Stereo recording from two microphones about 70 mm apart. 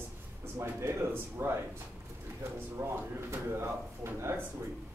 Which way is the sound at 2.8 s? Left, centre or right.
Right.